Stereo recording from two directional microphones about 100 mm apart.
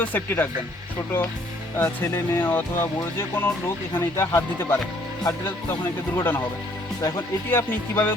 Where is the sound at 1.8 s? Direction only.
20° left (ahead or behind).